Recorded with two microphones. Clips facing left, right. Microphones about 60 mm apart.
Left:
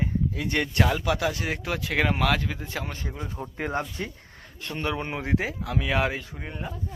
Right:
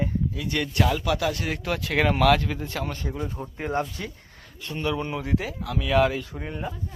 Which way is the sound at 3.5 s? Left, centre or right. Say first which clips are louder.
Right 1 dB; left.